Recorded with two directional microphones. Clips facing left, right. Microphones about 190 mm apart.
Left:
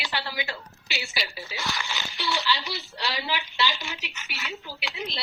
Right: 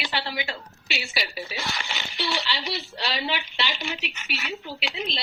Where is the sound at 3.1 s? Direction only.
25° right (ahead or behind).